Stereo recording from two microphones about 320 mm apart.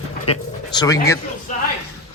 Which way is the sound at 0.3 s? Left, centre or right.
Centre.